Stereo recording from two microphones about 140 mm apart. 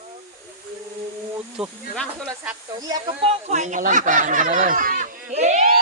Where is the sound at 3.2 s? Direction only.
55° right (ahead or behind); by 5.0 s 85° right.